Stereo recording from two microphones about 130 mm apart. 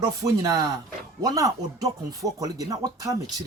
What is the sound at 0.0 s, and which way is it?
A woman's voice, 25° right (ahead or behind).